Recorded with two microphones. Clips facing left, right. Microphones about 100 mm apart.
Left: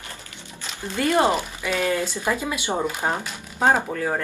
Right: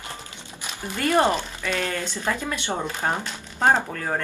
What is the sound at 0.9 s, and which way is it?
Speech, 15° left (ahead or behind).